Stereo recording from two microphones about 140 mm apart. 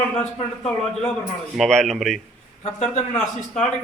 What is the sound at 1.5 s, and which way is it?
Speech, 5° left (ahead or behind).